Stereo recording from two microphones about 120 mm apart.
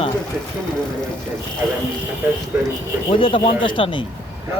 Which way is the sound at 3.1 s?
45° left (ahead or behind).